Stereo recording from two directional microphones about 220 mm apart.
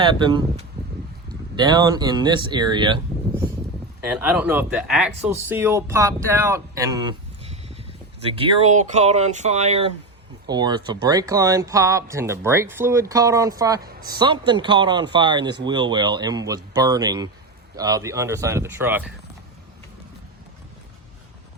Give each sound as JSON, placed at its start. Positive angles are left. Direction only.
{"t": 0.2, "sound": "speech", "side_deg": -20}
{"t": 4.1, "sound": "speech", "side_deg": -5}